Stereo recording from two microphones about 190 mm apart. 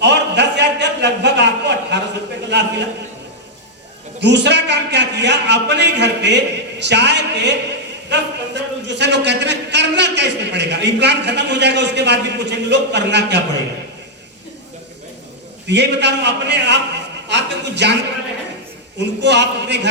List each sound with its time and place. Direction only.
0.0 s a sound: 65° right (ahead or behind)
2.5 s a man's voice: 65° right (ahead or behind)
4.2 s a man's voice: 65° right (ahead or behind)
15.6 s a man's voice: 65° right (ahead or behind)
18.9 s a man's voice: 65° right (ahead or behind)